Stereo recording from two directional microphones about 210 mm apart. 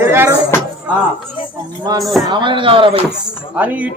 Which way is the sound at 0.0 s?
10° right (ahead or behind).